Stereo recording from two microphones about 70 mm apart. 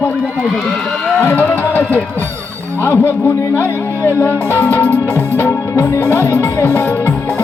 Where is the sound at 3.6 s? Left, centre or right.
Left.